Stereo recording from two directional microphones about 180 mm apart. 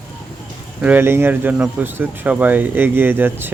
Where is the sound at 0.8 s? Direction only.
10° right (ahead or behind).